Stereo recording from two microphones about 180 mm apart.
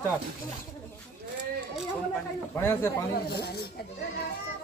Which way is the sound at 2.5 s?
15° left (ahead or behind).